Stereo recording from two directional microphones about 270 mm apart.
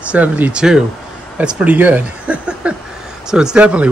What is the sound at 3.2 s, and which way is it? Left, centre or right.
Speech, centre.